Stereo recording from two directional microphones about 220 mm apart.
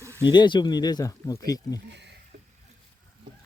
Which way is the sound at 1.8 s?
50° right (ahead or behind).